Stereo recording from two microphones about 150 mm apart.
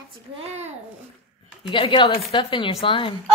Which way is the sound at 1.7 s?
35° left (ahead or behind).